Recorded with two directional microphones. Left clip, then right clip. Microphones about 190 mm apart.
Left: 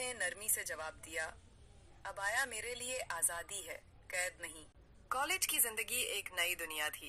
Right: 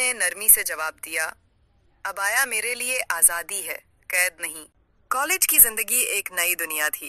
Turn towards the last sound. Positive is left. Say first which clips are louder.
# right 14 dB
turn(degrees=-45)  # may be behind; listen again after turning